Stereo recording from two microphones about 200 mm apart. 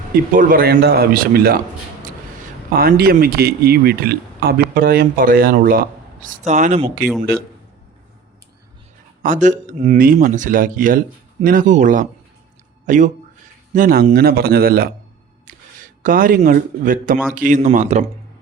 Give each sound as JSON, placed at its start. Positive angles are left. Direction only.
{"t": 0.3, "sound": "speech", "side_deg": -45}
{"t": 2.7, "sound": "speech", "side_deg": -50}
{"t": 9.2, "sound": "speech", "side_deg": -40}
{"t": 12.8, "sound": "a sound", "side_deg": -40}
{"t": 13.7, "sound": "speech", "side_deg": -45}